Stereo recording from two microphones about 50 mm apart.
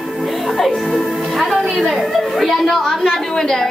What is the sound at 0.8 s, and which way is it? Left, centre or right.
A woman's voice, centre.